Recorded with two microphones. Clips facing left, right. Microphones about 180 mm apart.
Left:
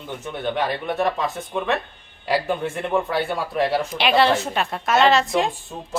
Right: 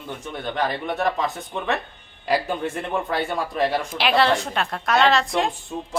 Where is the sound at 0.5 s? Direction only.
Centre (ahead or behind).